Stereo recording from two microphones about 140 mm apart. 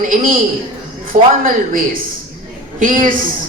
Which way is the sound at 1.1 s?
65° right (ahead or behind).